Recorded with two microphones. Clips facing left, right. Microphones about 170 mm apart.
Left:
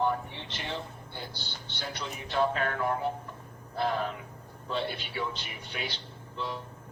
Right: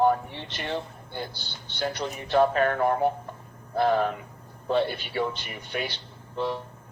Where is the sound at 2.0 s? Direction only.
50° right (ahead or behind).